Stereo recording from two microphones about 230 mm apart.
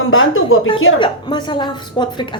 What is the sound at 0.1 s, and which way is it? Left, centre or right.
Speech, left.